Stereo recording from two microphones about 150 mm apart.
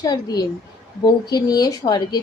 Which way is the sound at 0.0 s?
25° left (ahead or behind).